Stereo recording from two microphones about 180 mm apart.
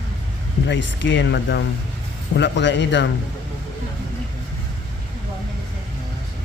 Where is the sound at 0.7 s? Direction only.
90° left.